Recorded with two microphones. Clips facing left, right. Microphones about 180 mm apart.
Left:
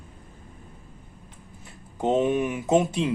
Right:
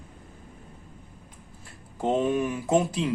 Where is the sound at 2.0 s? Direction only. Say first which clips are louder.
Left 2 dB; 20° left (ahead or behind).